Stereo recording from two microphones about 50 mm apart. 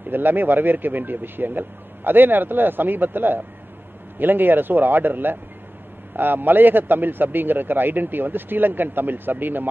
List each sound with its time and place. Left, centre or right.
0.1 s a man's voice: right